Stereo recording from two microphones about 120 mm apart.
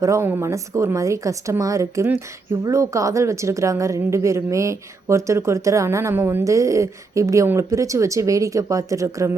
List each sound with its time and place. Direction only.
0.0 s a woman's voice: 20° right (ahead or behind)